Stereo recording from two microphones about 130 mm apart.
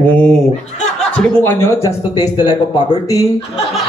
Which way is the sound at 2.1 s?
30° left (ahead or behind).